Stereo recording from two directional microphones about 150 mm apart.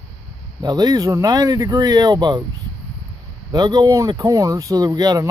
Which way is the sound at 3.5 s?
25° right (ahead or behind).